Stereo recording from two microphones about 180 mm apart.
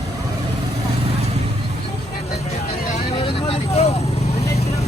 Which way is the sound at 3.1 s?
30° left (ahead or behind).